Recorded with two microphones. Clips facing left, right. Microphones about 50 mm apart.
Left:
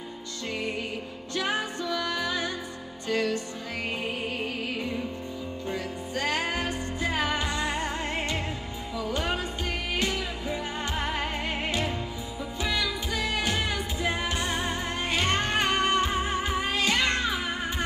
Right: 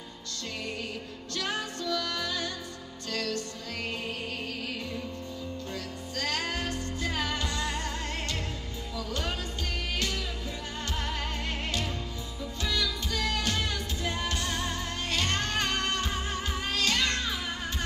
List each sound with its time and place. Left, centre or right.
1.3 s music: centre
4.4 s music: left